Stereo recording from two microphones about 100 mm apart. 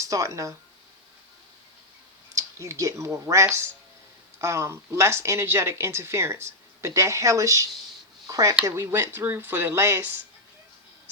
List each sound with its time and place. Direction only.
0.0 s speech: 30° right (ahead or behind)
2.3 s speech: 30° right (ahead or behind)